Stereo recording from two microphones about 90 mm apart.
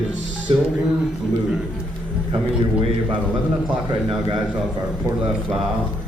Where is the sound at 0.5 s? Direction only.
90° right.